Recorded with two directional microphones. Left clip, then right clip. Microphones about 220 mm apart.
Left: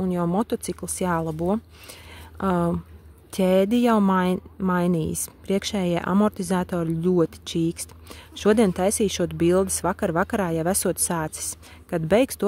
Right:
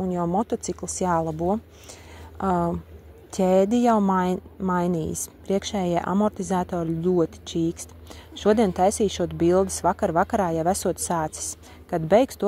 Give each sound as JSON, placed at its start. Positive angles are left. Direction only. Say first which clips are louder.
{"t": 0.1, "sound": "speech", "louder": "right 1 dB", "side_deg": 25}